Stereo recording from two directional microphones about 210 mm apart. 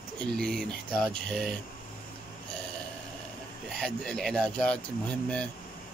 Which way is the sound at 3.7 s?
5° left (ahead or behind).